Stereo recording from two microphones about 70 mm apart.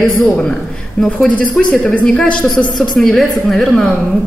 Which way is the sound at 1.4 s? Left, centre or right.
Centre.